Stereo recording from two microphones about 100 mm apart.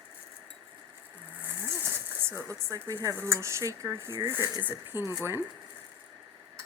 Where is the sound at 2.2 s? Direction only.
30° right (ahead or behind).